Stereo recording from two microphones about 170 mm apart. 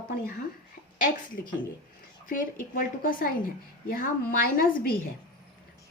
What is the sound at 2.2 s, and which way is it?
A woman's voice, 55° left (ahead or behind).